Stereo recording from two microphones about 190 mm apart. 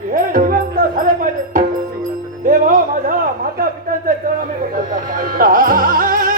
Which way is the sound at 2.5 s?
45° right (ahead or behind).